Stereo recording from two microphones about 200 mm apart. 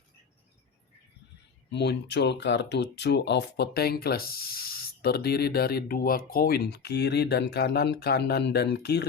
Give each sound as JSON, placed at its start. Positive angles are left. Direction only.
{"t": 1.7, "sound": "speech", "side_deg": 60}